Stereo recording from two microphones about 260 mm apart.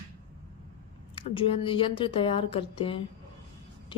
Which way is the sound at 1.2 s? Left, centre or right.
Left.